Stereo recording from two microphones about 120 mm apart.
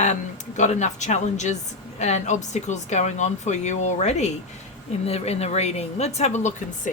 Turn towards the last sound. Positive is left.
turn(degrees=80)